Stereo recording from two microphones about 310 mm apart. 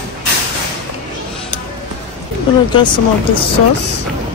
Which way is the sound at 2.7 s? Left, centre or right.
Centre.